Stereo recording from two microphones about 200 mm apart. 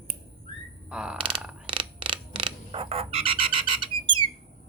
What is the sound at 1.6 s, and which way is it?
Frog, 25° right (ahead or behind).